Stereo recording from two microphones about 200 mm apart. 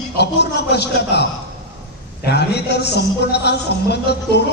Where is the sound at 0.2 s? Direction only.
55° left (ahead or behind).